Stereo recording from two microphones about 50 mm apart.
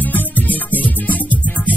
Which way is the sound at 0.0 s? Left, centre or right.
Left.